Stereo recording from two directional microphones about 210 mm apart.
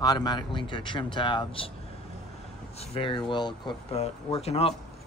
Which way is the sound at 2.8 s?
25° left (ahead or behind).